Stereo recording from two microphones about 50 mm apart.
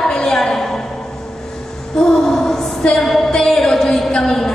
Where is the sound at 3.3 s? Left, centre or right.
Centre.